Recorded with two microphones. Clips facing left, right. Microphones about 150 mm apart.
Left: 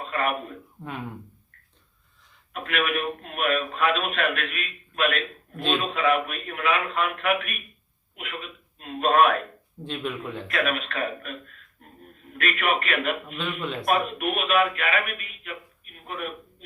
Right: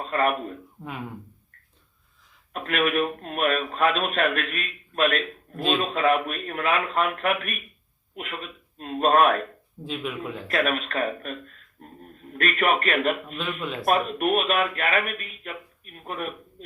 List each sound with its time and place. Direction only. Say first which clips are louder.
0.1 s speech: right 3 dB; 40° right (ahead or behind)
2.5 s a man's voice: right 2 dB; 40° right (ahead or behind)
9.8 s speech: even; 5° right (ahead or behind)
10.5 s a man's voice: right 2 dB; 40° right (ahead or behind)
13.2 s speech: even; centre (ahead or behind)
13.8 s a man's voice: right 2 dB; 40° right (ahead or behind)